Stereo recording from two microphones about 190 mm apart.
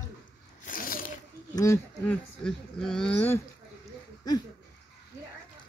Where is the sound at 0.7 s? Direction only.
50° left (ahead or behind).